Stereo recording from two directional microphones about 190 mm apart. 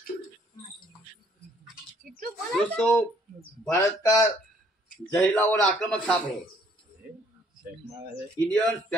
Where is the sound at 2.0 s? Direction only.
45° right (ahead or behind).